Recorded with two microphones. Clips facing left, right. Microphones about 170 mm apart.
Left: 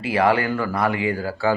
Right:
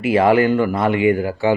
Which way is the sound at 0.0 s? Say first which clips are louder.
Right 5 dB; 25° right (ahead or behind).